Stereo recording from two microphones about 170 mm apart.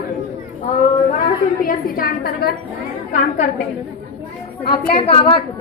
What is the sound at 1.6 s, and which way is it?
Speech, 60° left (ahead or behind).